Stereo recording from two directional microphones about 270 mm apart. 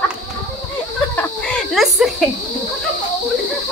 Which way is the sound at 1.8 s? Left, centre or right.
Centre.